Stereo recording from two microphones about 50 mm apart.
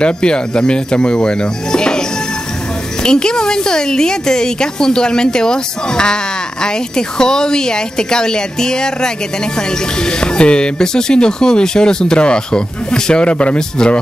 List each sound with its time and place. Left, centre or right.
0.0 s speech: centre
3.0 s speech: centre
10.2 s speech: centre